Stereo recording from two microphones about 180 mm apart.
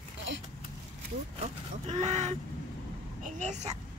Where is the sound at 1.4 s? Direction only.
40° right (ahead or behind).